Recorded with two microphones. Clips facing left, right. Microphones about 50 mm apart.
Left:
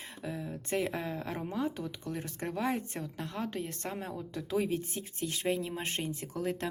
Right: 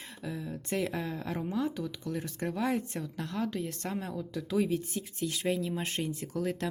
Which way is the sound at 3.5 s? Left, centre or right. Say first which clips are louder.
Right 2 dB; left.